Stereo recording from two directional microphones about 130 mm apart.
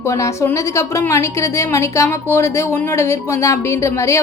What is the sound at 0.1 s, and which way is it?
A woman's voice, 25° left (ahead or behind).